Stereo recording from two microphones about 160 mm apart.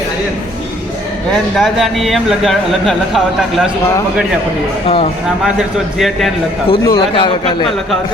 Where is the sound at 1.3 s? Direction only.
Centre (ahead or behind).